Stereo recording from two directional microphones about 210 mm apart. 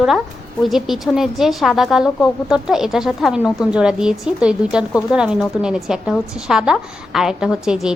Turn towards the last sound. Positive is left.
turn(degrees=-5)  # may be behind; listen again after turning